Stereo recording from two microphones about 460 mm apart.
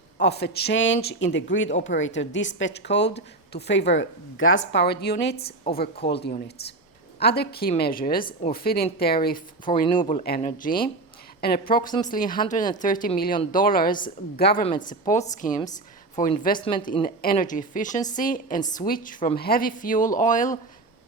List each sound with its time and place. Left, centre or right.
0.2 s speech: left